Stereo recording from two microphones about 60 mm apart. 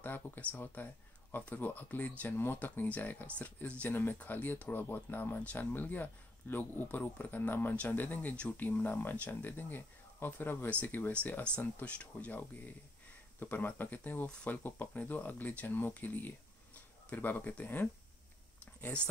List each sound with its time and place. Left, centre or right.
0.0 s speech: left
2.2 s speech: left
11.8 s speech: left